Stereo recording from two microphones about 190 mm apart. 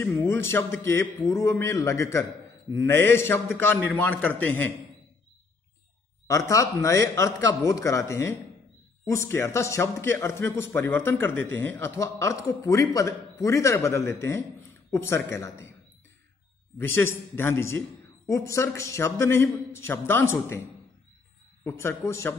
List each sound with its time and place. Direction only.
0.0 s speech: 10° left (ahead or behind)
6.2 s speech: 15° left (ahead or behind)
16.7 s speech: 10° left (ahead or behind)
21.6 s speech: 15° left (ahead or behind)